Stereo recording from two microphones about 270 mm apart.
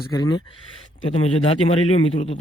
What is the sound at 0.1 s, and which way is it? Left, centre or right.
Speech, centre.